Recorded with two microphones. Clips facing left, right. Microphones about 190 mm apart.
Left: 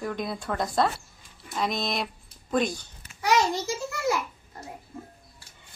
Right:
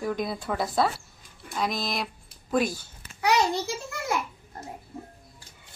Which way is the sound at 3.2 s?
60° right (ahead or behind).